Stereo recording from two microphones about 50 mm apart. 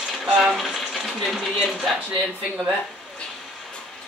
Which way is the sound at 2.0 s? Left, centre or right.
Right.